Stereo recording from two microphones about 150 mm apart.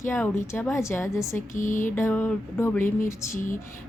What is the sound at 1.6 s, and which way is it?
Music, 60° left (ahead or behind).